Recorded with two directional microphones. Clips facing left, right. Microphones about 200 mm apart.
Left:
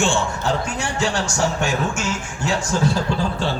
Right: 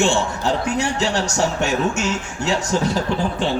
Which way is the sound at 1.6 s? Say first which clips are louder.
Right 2 dB; 20° right (ahead or behind).